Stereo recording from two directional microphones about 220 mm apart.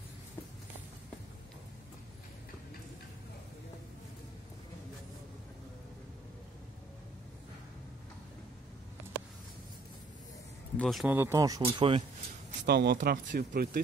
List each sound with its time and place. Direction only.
10.8 s speech: centre (ahead or behind); by 12.0 s 25° right (ahead or behind)
12.4 s speech: 45° right (ahead or behind)